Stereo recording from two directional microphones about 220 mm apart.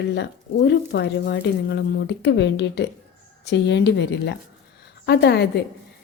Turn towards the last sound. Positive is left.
turn(degrees=50)  # may be behind; listen again after turning